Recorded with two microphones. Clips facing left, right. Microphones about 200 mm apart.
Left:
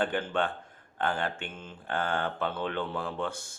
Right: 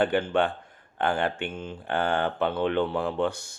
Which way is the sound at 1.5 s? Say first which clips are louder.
Right 9 dB; 10° right (ahead or behind).